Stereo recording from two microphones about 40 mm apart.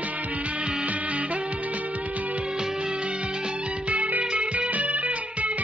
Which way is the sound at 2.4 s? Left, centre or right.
Centre.